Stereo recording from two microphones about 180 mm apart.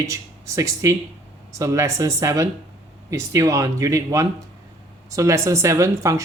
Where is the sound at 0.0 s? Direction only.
15° right (ahead or behind).